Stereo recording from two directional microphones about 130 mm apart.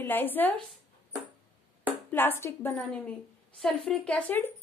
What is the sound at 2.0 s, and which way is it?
Speech, 15° left (ahead or behind).